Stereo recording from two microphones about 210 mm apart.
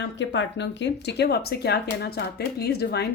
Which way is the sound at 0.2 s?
60° left (ahead or behind).